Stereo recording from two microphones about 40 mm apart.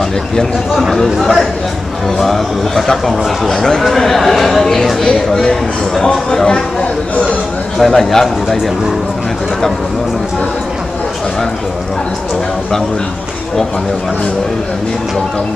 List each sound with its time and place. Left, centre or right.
0.4 s speech: centre
3.8 s speech: centre; by 7.3 s left
7.8 s speech: centre